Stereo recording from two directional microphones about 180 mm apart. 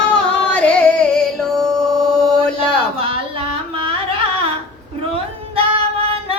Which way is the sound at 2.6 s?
30° right (ahead or behind).